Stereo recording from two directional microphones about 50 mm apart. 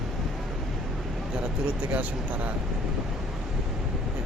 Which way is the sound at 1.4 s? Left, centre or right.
Right.